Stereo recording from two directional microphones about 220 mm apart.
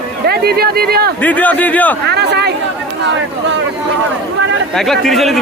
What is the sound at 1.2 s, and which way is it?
Speech, 5° left (ahead or behind).